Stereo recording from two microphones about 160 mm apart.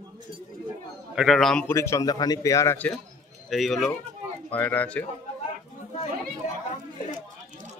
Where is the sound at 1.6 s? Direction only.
15° left (ahead or behind).